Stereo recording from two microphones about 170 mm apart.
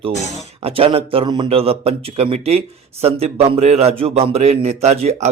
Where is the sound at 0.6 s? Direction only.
35° right (ahead or behind).